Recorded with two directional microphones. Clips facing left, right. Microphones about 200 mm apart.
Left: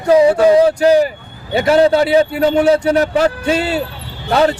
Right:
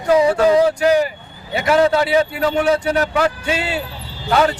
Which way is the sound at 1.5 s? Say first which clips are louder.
Left 4 dB; 30° left (ahead or behind).